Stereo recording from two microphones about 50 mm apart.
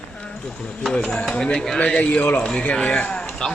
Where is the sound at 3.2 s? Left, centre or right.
Centre.